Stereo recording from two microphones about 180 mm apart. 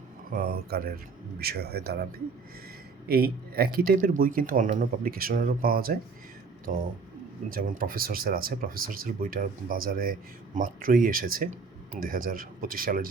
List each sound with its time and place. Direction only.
0.3 s a man's voice: 55° right (ahead or behind)
7.5 s speech: 55° right (ahead or behind)